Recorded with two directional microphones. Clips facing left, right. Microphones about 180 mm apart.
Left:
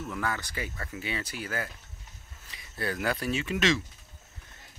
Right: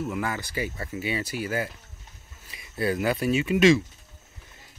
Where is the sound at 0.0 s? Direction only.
15° right (ahead or behind).